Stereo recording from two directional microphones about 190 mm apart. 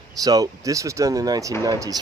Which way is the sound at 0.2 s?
20° right (ahead or behind).